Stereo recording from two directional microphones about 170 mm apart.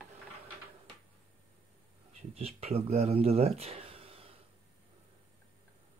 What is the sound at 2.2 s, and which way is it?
Speech, 35° right (ahead or behind).